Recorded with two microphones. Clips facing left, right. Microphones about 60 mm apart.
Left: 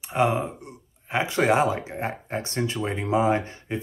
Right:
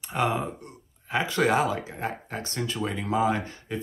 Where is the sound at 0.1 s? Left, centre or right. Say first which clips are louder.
Left 3 dB; centre.